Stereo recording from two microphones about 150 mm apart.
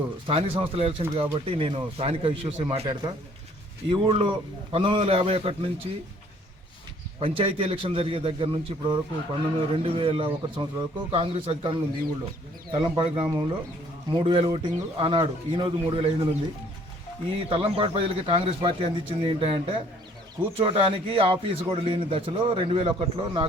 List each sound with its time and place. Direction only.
0.3 s a man's voice: 35° right (ahead or behind)
7.2 s a man's voice: 40° right (ahead or behind)
12.8 s a man's voice: 35° right (ahead or behind)
17.5 s a man's voice: 35° right (ahead or behind)